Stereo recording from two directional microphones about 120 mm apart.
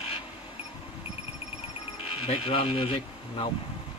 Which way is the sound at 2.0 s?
50° left (ahead or behind).